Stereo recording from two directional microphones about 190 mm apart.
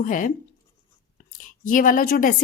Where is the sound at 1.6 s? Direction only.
45° left (ahead or behind).